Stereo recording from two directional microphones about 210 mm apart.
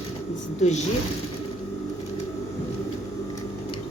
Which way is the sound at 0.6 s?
35° left (ahead or behind).